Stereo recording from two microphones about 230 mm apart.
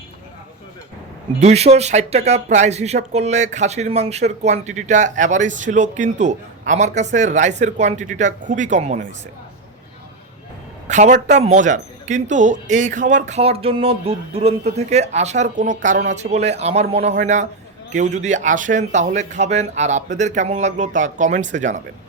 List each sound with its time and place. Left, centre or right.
1.4 s speech: right
10.8 s a woman's voice: right